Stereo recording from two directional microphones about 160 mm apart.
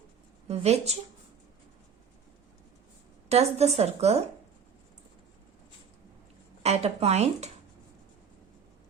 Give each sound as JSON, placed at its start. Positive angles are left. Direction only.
{"t": 0.4, "sound": "speech", "side_deg": -40}
{"t": 3.2, "sound": "a woman's voice", "side_deg": -40}
{"t": 6.6, "sound": "a woman's voice", "side_deg": -40}